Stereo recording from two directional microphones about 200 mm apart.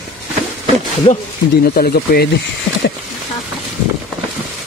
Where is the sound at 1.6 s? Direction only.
50° left (ahead or behind).